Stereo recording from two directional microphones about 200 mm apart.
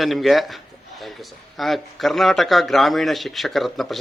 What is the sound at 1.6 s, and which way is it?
Speech, centre (ahead or behind).